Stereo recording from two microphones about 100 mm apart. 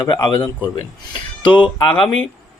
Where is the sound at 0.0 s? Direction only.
45° left (ahead or behind).